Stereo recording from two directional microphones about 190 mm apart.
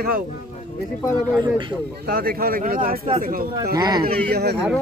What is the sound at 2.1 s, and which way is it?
Speech, 50° right (ahead or behind).